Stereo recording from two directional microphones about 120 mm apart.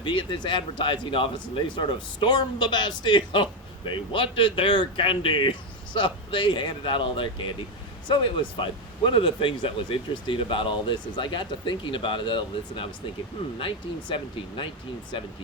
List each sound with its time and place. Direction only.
0.0 s speech: 45° left (ahead or behind)